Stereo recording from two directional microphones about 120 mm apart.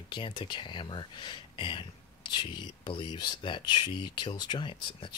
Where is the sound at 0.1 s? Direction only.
40° left (ahead or behind).